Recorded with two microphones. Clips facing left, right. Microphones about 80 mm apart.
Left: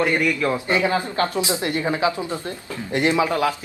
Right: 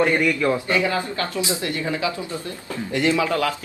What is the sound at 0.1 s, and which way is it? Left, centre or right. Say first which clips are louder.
Speech: right 1 dB; centre.